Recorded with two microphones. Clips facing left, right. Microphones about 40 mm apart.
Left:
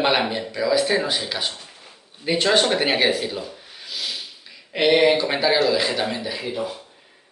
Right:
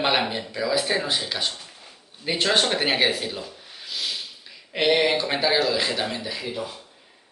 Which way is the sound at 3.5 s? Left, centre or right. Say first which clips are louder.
Left 1 dB; centre.